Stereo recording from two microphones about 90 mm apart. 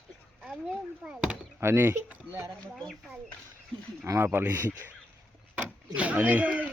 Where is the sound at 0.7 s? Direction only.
10° right (ahead or behind).